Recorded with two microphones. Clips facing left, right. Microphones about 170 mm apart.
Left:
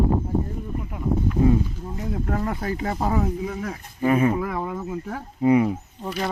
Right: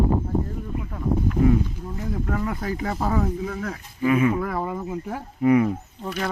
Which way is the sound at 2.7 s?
25° left (ahead or behind).